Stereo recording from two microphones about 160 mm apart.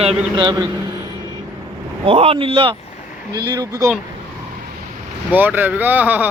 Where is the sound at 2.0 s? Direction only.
35° right (ahead or behind); by 3.9 s 20° right (ahead or behind).